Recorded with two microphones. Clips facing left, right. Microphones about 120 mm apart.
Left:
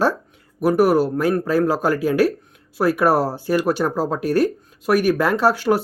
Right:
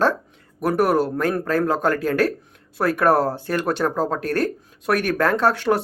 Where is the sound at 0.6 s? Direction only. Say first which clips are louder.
Left 3 dB; 5° left (ahead or behind).